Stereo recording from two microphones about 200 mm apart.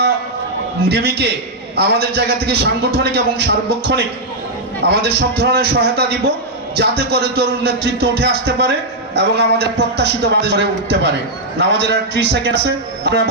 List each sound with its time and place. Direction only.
0.9 s a man's voice: 55° right (ahead or behind)